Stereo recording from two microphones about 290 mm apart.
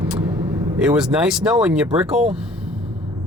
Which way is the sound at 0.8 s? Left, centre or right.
Centre.